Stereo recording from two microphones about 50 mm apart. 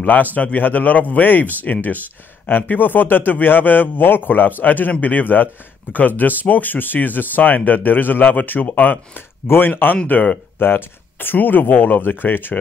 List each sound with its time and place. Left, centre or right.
0.0 s speech: left